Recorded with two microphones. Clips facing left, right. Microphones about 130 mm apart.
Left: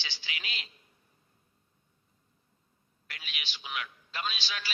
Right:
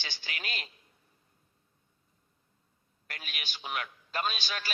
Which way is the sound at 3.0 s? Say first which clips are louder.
Right 1 dB; 50° right (ahead or behind).